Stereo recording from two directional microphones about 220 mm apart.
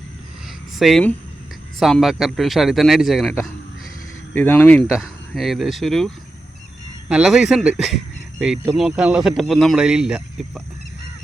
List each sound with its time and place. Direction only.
0.8 s speech: centre (ahead or behind)
4.4 s speech: 5° left (ahead or behind)
7.1 s speech: 5° right (ahead or behind)